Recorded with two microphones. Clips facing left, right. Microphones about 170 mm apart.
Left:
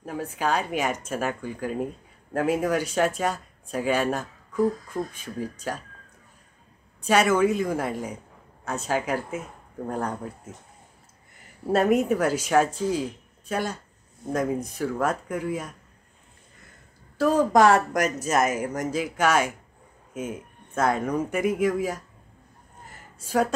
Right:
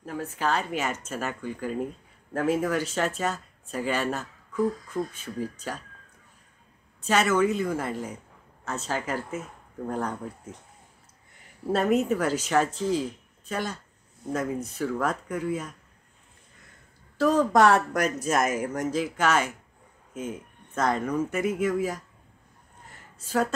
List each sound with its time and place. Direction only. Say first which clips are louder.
0.0 s speech: left 1 dB; 15° left (ahead or behind)
7.0 s speech: left 2 dB; 10° left (ahead or behind)
11.6 s speech: left 2 dB; 10° left (ahead or behind)
17.2 s speech: left 1 dB; 10° left (ahead or behind)
22.9 s a sound: left 2 dB; 10° left (ahead or behind)